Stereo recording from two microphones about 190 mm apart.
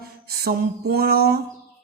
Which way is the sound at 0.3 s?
55° right (ahead or behind).